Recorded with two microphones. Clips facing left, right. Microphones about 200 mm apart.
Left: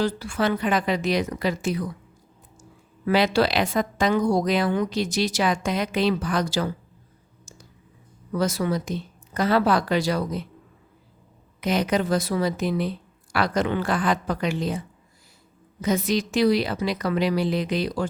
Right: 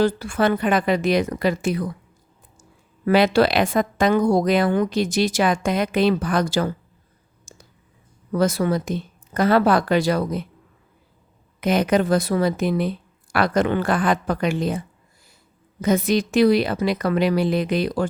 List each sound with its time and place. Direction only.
0.0 s speech: 55° right (ahead or behind)
3.1 s a woman's voice: 55° right (ahead or behind)
8.3 s speech: 55° right (ahead or behind)
11.6 s speech: 55° right (ahead or behind)
15.8 s speech: 55° right (ahead or behind)